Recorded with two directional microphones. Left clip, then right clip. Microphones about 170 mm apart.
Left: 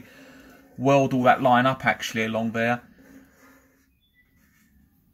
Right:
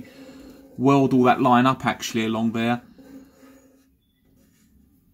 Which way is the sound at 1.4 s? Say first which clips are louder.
Right 1 dB; 20° left (ahead or behind).